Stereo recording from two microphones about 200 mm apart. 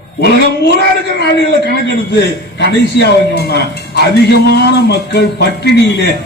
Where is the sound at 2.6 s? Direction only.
60° left (ahead or behind).